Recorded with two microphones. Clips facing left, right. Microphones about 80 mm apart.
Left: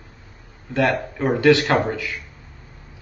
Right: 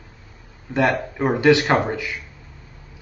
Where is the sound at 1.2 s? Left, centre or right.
Centre.